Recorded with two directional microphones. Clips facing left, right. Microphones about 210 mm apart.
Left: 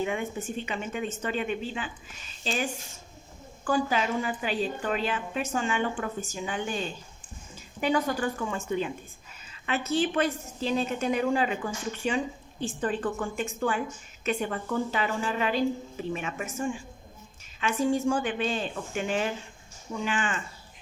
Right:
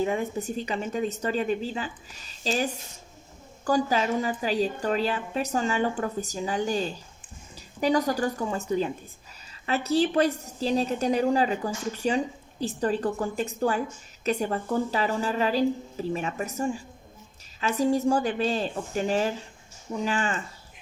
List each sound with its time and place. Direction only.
0.0 s a woman's voice: 35° right (ahead or behind)